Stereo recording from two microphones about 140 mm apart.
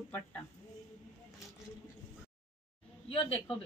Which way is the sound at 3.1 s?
40° left (ahead or behind).